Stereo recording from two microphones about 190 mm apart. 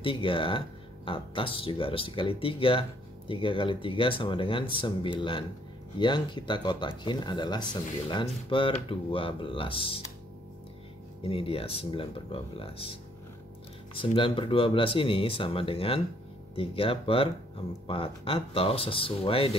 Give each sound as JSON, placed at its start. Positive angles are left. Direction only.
{"t": 0.0, "sound": "speech", "side_deg": 25}
{"t": 11.2, "sound": "speech", "side_deg": 30}
{"t": 13.9, "sound": "speech", "side_deg": 25}